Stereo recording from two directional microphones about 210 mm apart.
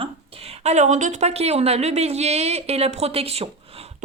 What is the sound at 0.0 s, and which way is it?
Speech, 25° right (ahead or behind).